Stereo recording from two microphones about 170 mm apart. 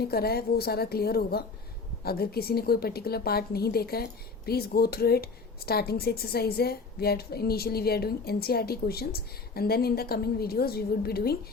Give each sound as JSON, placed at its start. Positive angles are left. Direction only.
{"t": 0.0, "sound": "a woman's voice", "side_deg": 65}